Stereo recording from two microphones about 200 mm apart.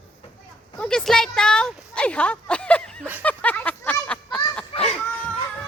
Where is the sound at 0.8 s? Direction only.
5° left (ahead or behind).